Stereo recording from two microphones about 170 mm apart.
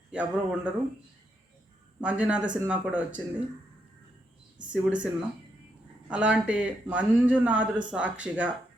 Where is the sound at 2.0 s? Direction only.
5° right (ahead or behind).